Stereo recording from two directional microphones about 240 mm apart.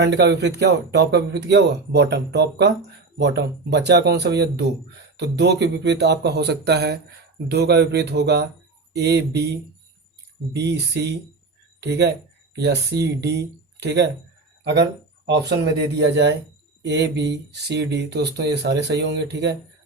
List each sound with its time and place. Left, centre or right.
0.0 s speech: right